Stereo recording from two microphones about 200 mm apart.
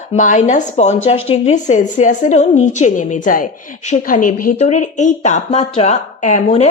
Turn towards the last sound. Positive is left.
turn(degrees=35)  # may be behind; listen again after turning